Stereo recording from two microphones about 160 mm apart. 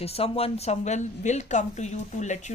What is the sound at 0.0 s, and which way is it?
A woman's voice, 40° left (ahead or behind).